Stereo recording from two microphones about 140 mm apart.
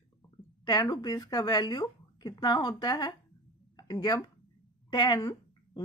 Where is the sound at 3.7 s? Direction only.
30° left (ahead or behind).